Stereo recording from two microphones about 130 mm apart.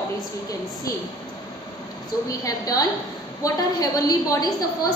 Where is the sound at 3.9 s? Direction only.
30° left (ahead or behind).